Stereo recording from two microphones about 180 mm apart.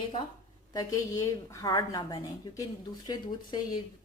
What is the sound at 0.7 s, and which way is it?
Speech, 20° left (ahead or behind).